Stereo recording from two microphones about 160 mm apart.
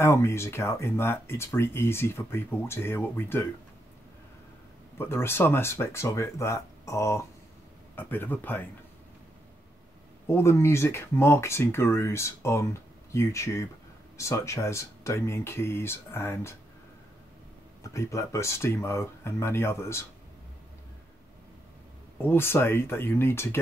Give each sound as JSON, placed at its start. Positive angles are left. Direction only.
{"t": 0.0, "sound": "speech", "side_deg": 15}
{"t": 4.9, "sound": "speech", "side_deg": 15}
{"t": 10.2, "sound": "speech", "side_deg": 15}
{"t": 17.8, "sound": "speech", "side_deg": 20}
{"t": 22.2, "sound": "speech", "side_deg": 15}